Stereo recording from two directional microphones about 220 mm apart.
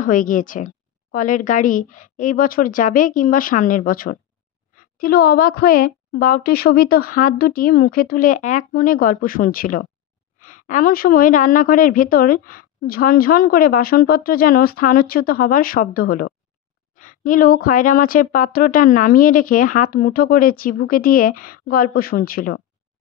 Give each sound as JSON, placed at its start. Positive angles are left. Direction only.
{"t": 0.0, "sound": "a woman's voice", "side_deg": 40}